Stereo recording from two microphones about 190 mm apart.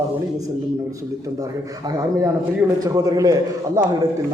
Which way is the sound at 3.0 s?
20° right (ahead or behind).